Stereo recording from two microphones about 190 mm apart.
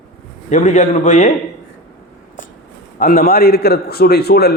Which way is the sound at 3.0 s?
50° left (ahead or behind).